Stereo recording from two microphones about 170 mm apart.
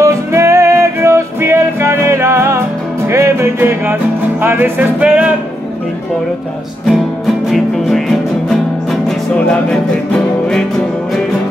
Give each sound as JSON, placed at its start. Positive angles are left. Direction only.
{"t": 0.0, "sound": "music", "side_deg": -15}
{"t": 6.9, "sound": "music", "side_deg": 0}